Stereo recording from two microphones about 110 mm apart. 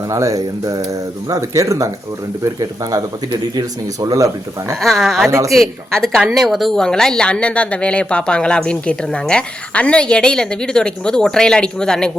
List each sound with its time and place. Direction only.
0.1 s speech: 30° right (ahead or behind)
4.0 s speech: 35° right (ahead or behind)
4.8 s a woman's voice: centre (ahead or behind)